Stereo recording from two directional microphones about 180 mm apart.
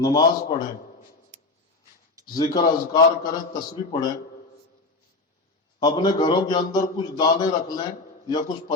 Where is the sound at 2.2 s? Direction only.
20° left (ahead or behind).